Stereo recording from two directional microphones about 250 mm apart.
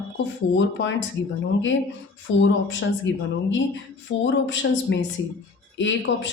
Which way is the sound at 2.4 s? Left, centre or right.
Left.